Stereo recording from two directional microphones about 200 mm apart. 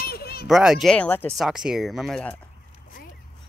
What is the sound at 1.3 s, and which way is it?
Speech, centre (ahead or behind).